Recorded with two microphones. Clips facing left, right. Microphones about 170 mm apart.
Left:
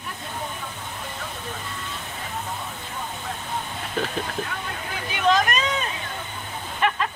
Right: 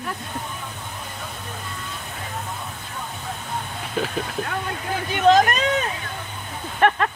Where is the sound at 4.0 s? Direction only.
5° right (ahead or behind).